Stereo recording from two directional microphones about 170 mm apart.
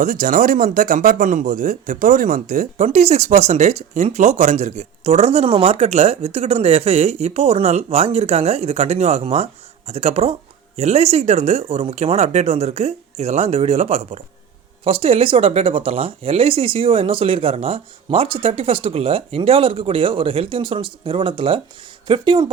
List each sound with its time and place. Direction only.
0.0 s speech: 55° right (ahead or behind); by 22.4 s 30° right (ahead or behind)